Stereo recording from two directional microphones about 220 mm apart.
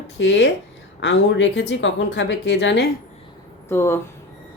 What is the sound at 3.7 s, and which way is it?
Speech, 10° left (ahead or behind).